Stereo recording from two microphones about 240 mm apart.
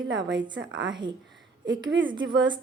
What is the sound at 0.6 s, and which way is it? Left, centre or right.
Speech, right.